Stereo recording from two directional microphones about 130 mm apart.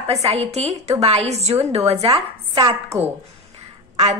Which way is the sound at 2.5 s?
25° right (ahead or behind).